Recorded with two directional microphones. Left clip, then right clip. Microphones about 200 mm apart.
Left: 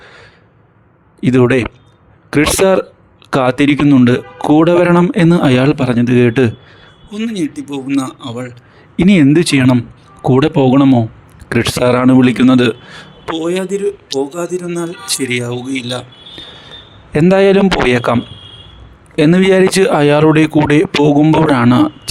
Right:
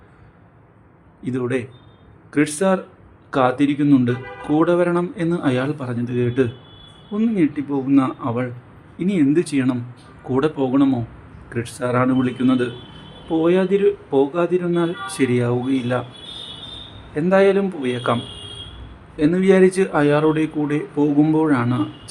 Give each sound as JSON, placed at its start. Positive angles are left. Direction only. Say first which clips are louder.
{"t": 1.2, "sound": "speech", "louder": "left 12 dB", "side_deg": 45}
{"t": 7.9, "sound": "a man's voice", "louder": "even", "side_deg": 0}
{"t": 9.0, "sound": "speech", "louder": "left 8 dB", "side_deg": 45}
{"t": 13.4, "sound": "a man's voice", "louder": "right 1 dB", "side_deg": 0}
{"t": 17.2, "sound": "speech", "louder": "left 6 dB", "side_deg": 50}